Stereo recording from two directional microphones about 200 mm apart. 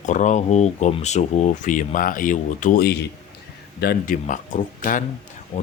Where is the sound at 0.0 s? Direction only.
35° left (ahead or behind).